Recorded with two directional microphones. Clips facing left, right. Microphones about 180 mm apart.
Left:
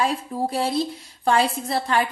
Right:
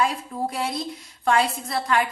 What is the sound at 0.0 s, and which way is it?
A woman's voice, 30° left (ahead or behind).